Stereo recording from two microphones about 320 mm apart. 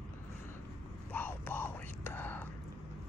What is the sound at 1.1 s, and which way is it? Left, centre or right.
Whispering, centre.